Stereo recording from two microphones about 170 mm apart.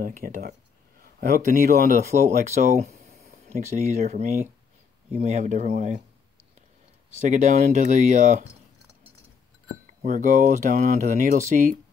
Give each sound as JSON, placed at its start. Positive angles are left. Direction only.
{"t": 0.0, "sound": "speech", "side_deg": -55}
{"t": 2.5, "sound": "speech", "side_deg": -45}
{"t": 7.2, "sound": "speech", "side_deg": -45}
{"t": 10.0, "sound": "speech", "side_deg": -50}